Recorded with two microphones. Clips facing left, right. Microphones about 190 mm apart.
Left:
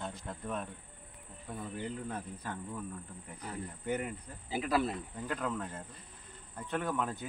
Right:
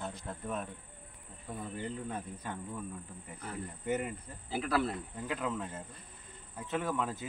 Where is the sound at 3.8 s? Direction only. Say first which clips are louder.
Right 1 dB; 5° right (ahead or behind).